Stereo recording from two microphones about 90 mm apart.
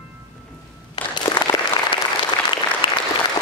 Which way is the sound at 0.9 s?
65° left (ahead or behind).